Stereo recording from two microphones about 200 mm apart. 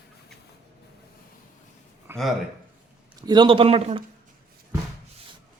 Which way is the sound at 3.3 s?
25° right (ahead or behind).